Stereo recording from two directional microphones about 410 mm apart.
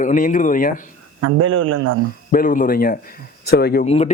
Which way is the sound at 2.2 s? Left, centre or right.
Centre.